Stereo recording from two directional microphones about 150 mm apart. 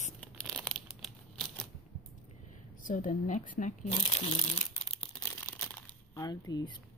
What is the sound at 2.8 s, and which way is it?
Speech, 55° left (ahead or behind).